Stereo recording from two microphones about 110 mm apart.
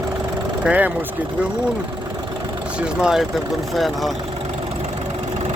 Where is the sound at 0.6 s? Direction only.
15° right (ahead or behind).